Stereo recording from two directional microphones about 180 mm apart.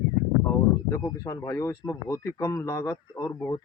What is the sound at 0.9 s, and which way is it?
Speech, 20° left (ahead or behind).